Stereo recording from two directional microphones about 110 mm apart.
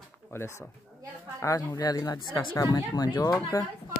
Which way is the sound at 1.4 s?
30° left (ahead or behind).